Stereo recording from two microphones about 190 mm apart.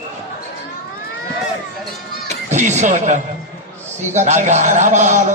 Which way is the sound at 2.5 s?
40° right (ahead or behind).